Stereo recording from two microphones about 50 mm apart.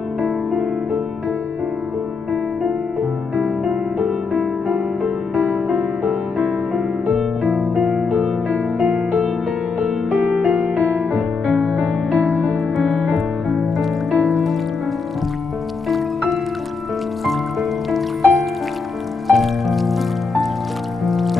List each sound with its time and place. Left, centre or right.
5.7 s music: centre
7.9 s music: centre
10.2 s music: right
12.4 s music: centre
17.3 s music: centre